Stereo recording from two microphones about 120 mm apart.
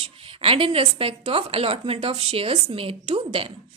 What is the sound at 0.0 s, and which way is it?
A woman's voice, 50° right (ahead or behind).